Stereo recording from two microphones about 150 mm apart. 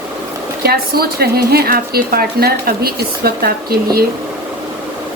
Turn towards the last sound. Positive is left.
turn(degrees=-90)